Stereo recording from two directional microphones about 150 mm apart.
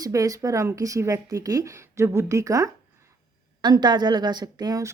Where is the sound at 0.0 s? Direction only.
25° right (ahead or behind).